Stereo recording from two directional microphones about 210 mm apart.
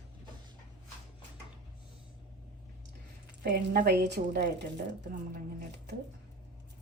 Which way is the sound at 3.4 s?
45° right (ahead or behind).